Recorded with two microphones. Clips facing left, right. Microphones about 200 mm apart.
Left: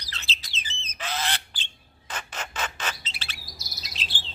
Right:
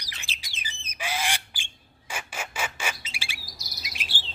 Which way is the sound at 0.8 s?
10° right (ahead or behind).